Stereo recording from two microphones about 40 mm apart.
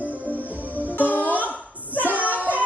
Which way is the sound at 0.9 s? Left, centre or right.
Left.